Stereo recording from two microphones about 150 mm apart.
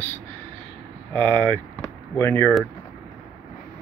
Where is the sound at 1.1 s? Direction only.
30° right (ahead or behind).